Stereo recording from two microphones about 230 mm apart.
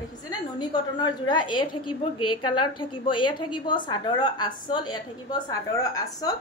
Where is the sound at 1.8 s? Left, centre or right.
Left.